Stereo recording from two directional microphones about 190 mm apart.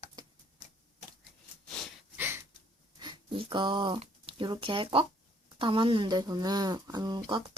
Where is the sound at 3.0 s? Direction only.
25° right (ahead or behind).